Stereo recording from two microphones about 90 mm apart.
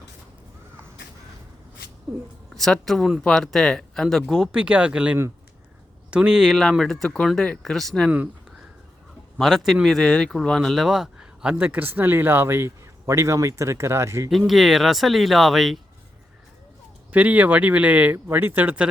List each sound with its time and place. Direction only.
2.6 s speech: 5° left (ahead or behind)
9.4 s speech: centre (ahead or behind)
11.5 s a man's voice: 20° right (ahead or behind)
14.3 s speech: centre (ahead or behind)
17.1 s speech: 15° right (ahead or behind)